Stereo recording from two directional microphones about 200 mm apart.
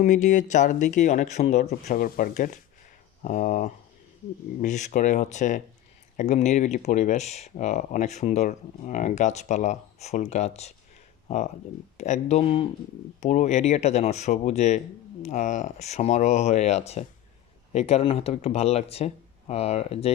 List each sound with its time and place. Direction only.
0.0 s speech: 40° left (ahead or behind)
11.9 s speech: 35° left (ahead or behind)